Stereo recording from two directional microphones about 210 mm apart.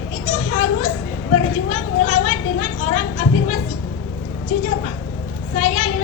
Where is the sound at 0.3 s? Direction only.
35° left (ahead or behind).